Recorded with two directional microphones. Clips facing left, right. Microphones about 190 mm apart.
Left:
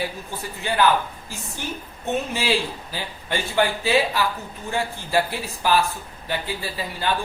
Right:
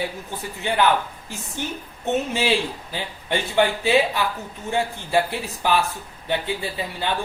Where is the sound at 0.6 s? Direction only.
20° right (ahead or behind).